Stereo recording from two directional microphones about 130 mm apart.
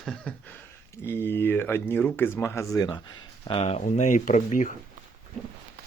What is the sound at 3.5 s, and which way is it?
Speech, 50° left (ahead or behind).